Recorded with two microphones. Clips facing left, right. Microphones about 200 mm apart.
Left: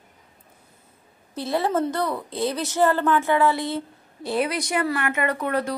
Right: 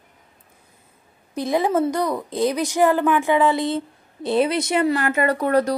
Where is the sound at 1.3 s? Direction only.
15° right (ahead or behind); by 5.7 s 40° right (ahead or behind).